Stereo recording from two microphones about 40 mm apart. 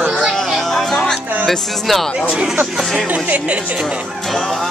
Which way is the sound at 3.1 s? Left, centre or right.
Right.